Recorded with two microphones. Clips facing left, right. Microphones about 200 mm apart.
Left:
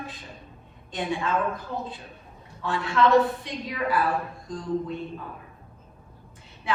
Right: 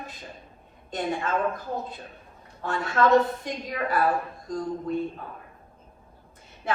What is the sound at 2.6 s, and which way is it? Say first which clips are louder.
A woman's voice: left 1 dB; 45° right (ahead or behind).